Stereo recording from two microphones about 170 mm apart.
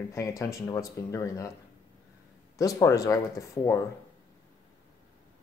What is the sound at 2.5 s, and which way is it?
Speech, 20° left (ahead or behind).